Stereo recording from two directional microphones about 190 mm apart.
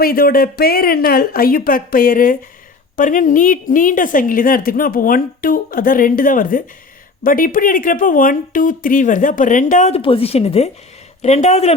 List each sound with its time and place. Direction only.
0.0 s a woman's voice: 50° left (ahead or behind); by 11.7 s 35° left (ahead or behind)